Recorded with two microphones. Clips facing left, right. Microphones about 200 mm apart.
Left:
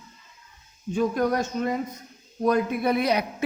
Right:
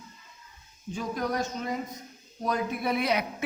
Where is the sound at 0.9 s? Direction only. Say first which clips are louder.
Left 7 dB; 60° left (ahead or behind).